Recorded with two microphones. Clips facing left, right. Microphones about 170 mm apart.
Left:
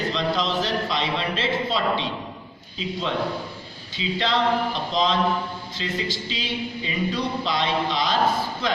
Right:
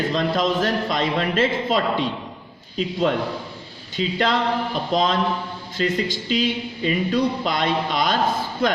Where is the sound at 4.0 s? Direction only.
50° right (ahead or behind).